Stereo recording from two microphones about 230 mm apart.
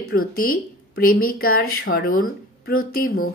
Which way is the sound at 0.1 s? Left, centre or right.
Left.